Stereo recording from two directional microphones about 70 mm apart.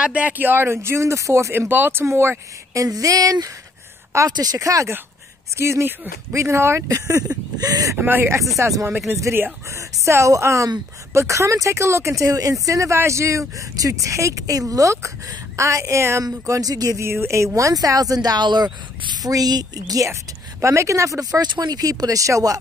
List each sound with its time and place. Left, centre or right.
0.0 s speech: centre; by 1.7 s right
1.7 s speech: right
2.7 s speech: right
5.6 s speech: right
6.9 s speech: right
8.0 s speech: right
8.5 s speech: right
16.3 s speech: right
17.0 s speech: right
20.6 s speech: right